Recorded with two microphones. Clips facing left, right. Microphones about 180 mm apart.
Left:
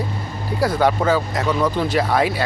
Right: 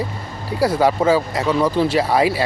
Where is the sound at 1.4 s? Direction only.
30° right (ahead or behind).